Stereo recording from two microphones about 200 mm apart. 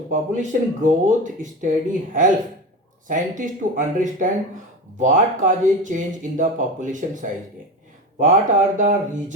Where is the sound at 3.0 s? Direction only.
40° right (ahead or behind).